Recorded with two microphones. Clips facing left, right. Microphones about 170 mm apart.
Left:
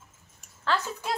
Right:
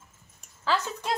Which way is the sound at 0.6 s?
Centre (ahead or behind).